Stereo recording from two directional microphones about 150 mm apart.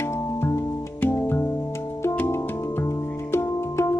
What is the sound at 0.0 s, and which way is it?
Music, 15° left (ahead or behind).